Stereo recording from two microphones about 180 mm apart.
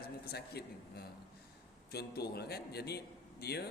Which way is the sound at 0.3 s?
65° left (ahead or behind).